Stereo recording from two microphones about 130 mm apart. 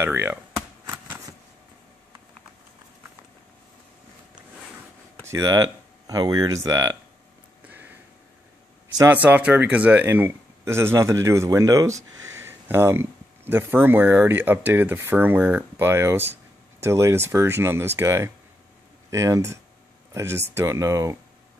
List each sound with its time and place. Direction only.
0.0 s speech: 20° right (ahead or behind)
0.8 s shuffling cards: 15° right (ahead or behind)
5.2 s speech: 25° right (ahead or behind)
7.6 s a sound: 15° right (ahead or behind)
9.1 s speech: 15° right (ahead or behind)